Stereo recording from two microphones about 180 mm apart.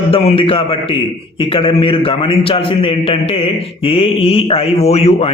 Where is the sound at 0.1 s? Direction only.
35° left (ahead or behind).